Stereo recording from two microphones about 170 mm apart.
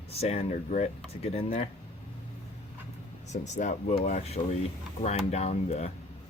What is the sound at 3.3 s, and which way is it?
Speech, 45° left (ahead or behind).